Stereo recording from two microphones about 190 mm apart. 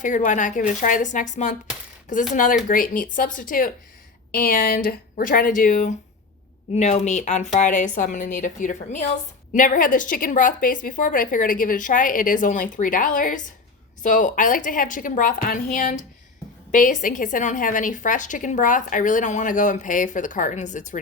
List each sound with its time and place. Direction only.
0.0 s a woman's voice: 40° left (ahead or behind)